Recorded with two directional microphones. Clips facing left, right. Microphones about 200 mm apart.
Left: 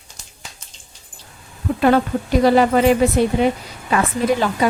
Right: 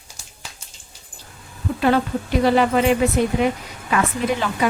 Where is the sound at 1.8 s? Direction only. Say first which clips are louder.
Left 3 dB; 50° left (ahead or behind).